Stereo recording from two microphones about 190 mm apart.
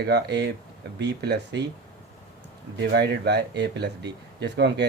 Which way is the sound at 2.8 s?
60° right (ahead or behind).